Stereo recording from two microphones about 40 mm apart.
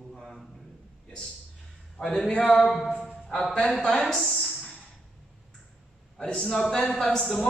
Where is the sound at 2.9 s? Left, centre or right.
Left.